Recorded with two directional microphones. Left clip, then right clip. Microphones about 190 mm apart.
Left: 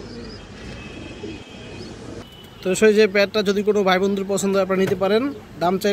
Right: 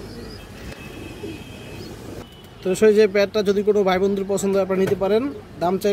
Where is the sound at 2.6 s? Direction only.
5° right (ahead or behind).